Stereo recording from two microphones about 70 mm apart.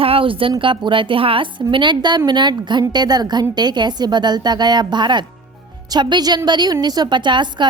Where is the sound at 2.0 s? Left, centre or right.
Right.